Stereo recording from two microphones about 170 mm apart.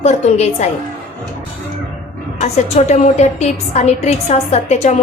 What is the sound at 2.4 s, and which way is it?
A woman's voice, 40° left (ahead or behind).